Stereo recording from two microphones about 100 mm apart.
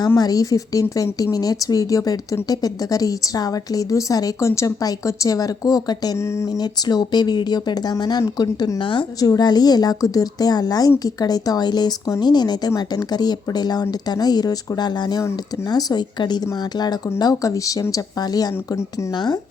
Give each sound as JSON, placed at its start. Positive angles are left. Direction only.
{"t": 0.2, "sound": "a woman's voice", "side_deg": 35}
{"t": 9.3, "sound": "a woman's voice", "side_deg": 45}